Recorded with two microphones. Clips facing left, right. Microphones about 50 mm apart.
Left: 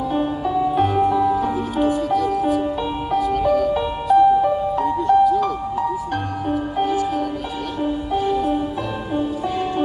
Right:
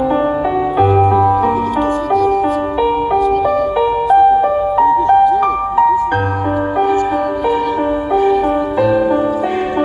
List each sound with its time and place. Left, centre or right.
0.7 s music: right
4.1 s music: right